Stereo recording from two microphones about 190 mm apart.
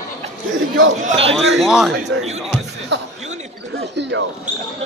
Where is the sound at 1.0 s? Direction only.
35° right (ahead or behind).